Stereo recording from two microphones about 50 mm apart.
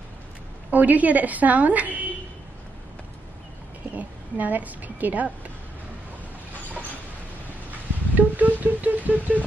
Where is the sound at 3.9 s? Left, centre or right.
Right.